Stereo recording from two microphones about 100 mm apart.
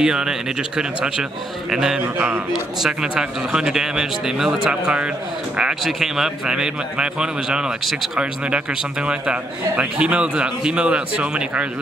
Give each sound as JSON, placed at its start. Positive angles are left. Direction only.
{"t": 0.0, "sound": "a man's voice", "side_deg": -5}
{"t": 2.1, "sound": "a man's voice", "side_deg": -15}
{"t": 2.8, "sound": "a man's voice", "side_deg": -5}